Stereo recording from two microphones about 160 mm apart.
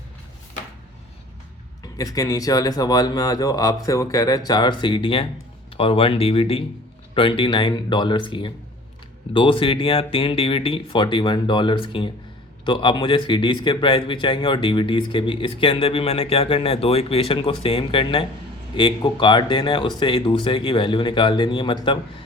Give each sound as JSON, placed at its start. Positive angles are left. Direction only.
{"t": 1.8, "sound": "a man's voice", "side_deg": 25}